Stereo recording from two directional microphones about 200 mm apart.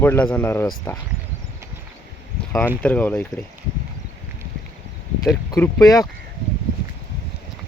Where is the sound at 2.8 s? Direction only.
10° left (ahead or behind).